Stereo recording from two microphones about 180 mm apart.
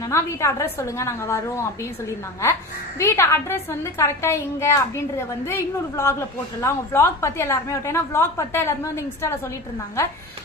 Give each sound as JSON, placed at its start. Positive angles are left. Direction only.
{"t": 0.1, "sound": "a woman's voice", "side_deg": 15}
{"t": 10.0, "sound": "a woman's voice", "side_deg": 15}